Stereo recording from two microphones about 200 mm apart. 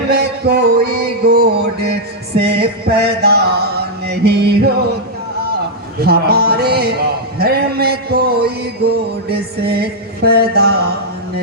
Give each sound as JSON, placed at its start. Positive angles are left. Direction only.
{"t": 0.1, "sound": "music", "side_deg": -50}
{"t": 6.0, "sound": "music", "side_deg": -50}